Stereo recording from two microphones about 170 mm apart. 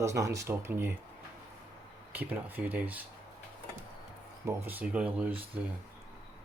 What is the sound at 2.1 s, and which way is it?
Speech, 10° right (ahead or behind).